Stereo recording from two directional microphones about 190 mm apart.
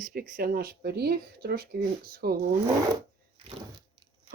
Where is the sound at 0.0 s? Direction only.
50° right (ahead or behind).